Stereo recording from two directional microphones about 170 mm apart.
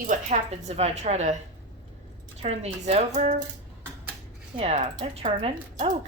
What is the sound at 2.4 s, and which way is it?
Speech, 40° right (ahead or behind).